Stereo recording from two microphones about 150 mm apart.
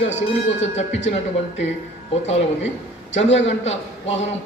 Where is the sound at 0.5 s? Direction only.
50° left (ahead or behind).